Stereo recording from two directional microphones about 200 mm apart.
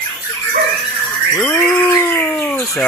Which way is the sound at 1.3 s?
10° left (ahead or behind).